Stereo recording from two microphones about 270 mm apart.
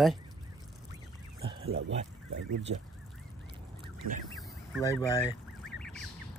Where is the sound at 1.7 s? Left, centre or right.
Right.